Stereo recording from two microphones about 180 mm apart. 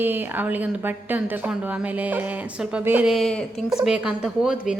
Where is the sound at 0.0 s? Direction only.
10° right (ahead or behind).